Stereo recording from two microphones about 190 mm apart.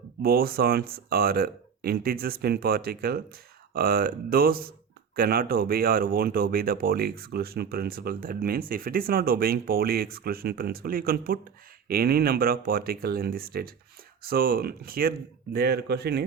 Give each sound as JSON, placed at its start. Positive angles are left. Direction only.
{"t": 0.2, "sound": "speech", "side_deg": -55}